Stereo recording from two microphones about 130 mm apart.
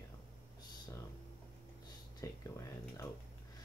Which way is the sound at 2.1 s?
25° left (ahead or behind).